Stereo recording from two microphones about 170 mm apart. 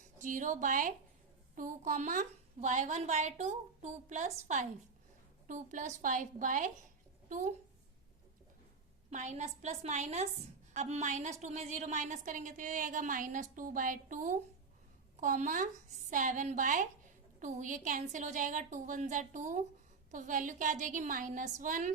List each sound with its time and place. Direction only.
0.2 s a woman's voice: 50° right (ahead or behind)
9.0 s a woman's voice: 45° right (ahead or behind)